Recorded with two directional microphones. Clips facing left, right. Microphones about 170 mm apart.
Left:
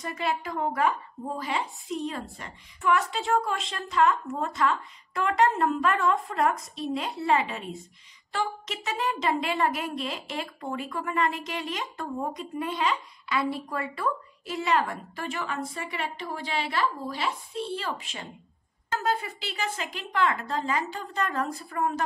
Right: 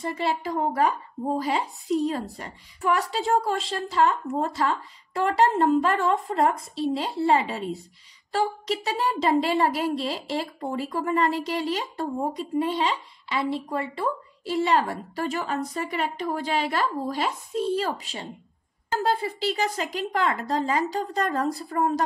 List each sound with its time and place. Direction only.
0.0 s a woman's voice: 30° right (ahead or behind)